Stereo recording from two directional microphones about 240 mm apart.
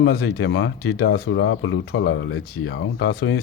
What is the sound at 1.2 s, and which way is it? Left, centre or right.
Speech, left.